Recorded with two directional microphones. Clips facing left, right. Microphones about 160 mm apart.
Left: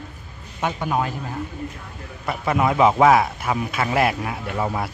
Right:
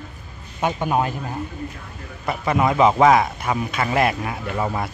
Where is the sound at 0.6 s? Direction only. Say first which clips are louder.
Right 2 dB; 20° right (ahead or behind).